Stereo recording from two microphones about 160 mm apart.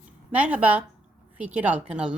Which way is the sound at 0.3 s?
10° right (ahead or behind).